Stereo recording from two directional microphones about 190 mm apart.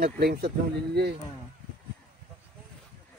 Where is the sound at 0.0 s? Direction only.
55° right (ahead or behind).